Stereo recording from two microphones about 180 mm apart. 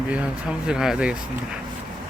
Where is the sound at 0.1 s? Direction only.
5° right (ahead or behind).